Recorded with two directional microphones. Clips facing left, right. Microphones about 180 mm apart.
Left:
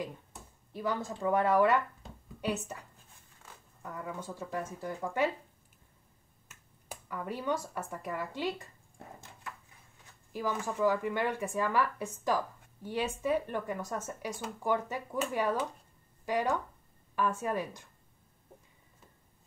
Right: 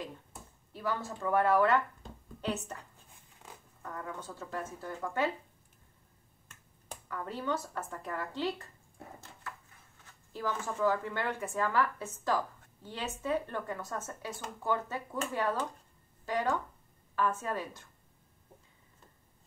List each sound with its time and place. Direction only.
0.7 s speech: 15° left (ahead or behind)
3.4 s a sound: 15° right (ahead or behind)
3.8 s speech: 10° left (ahead or behind)
6.5 s speech: 10° left (ahead or behind)
10.3 s speech: 10° left (ahead or behind)